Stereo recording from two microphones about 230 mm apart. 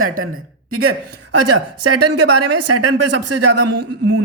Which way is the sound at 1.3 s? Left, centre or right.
Right.